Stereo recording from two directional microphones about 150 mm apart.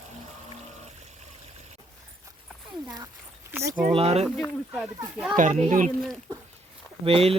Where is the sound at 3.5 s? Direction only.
15° right (ahead or behind).